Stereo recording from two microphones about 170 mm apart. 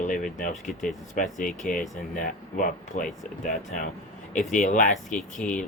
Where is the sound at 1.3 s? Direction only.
Centre (ahead or behind).